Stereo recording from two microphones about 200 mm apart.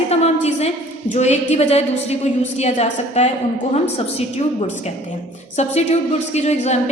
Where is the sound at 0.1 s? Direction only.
30° left (ahead or behind).